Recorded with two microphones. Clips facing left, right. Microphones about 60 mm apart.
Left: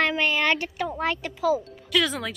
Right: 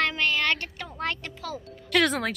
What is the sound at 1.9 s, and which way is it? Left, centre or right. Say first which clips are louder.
Speech: right 2 dB; right.